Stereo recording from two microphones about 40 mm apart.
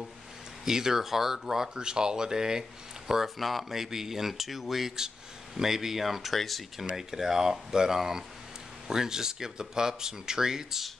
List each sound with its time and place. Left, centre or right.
0.7 s speech: centre
1.8 s speech: centre
3.3 s speech: centre
7.0 s speech: centre